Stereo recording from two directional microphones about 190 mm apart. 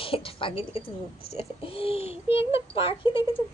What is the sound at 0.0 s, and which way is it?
Speech, 30° left (ahead or behind).